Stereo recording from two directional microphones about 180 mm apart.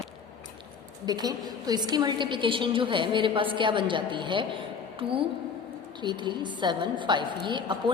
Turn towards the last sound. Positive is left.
turn(degrees=-25)  # may be behind; listen again after turning